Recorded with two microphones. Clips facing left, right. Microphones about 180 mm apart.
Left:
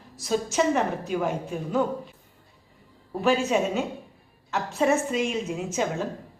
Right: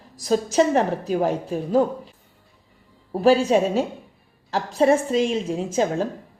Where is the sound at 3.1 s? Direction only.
35° right (ahead or behind).